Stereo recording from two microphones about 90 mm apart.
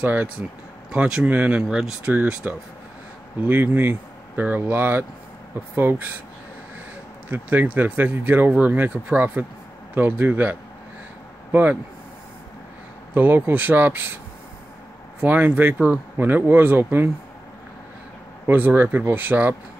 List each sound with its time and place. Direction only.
0.0 s speech: 20° right (ahead or behind)
7.2 s speech: 20° right (ahead or behind)
13.1 s speech: 20° right (ahead or behind)
15.1 s speech: 20° right (ahead or behind)
18.5 s speech: 20° right (ahead or behind)